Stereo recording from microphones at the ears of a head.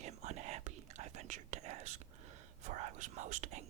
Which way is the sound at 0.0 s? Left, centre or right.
Right.